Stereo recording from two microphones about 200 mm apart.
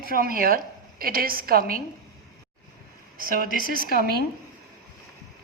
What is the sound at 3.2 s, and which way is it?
Speech, 45° right (ahead or behind).